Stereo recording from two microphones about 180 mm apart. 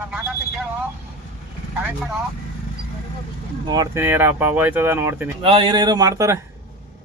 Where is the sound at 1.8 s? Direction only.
Centre (ahead or behind).